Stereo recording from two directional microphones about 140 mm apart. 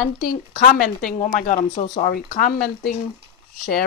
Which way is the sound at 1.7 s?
45° left (ahead or behind).